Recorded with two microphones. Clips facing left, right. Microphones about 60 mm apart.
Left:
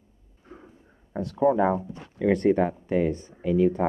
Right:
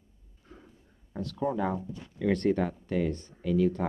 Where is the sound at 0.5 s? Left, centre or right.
Left.